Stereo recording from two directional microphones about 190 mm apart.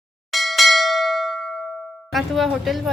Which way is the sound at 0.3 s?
Centre (ahead or behind).